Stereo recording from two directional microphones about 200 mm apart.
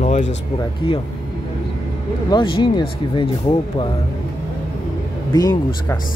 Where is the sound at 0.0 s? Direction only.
35° left (ahead or behind).